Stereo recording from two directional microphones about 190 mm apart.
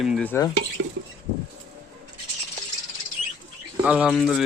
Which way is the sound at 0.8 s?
65° right (ahead or behind).